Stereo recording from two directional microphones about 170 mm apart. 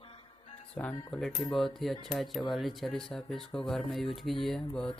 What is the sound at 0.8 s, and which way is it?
Music, 10° left (ahead or behind).